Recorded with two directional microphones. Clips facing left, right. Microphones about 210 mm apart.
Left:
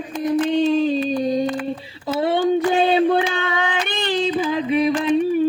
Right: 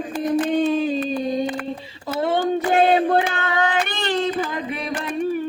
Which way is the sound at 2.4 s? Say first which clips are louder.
Even; 55° right (ahead or behind).